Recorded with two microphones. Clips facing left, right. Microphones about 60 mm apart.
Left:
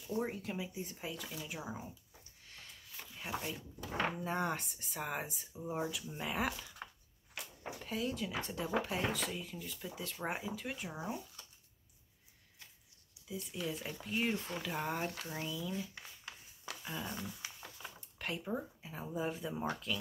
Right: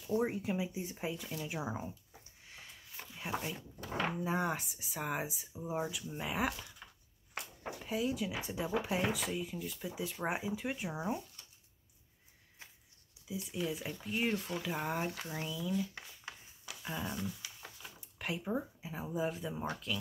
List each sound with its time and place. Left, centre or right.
0.1 s speech: centre
3.2 s speech: centre
6.8 s a sound: left
7.6 s speech: centre
13.3 s speech: centre
16.9 s speech: centre
17.4 s a sound: left
18.2 s speech: centre